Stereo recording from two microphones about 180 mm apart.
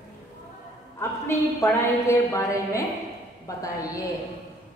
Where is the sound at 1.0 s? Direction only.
15° left (ahead or behind).